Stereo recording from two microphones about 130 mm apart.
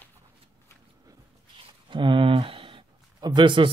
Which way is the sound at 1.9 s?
40° right (ahead or behind).